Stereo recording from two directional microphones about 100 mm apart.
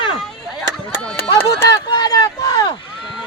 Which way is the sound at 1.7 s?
45° left (ahead or behind).